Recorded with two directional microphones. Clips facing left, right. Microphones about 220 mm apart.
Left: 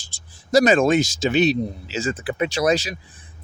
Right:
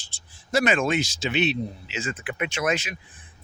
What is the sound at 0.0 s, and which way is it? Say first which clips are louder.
Speech: left 4 dB; 40° left (ahead or behind).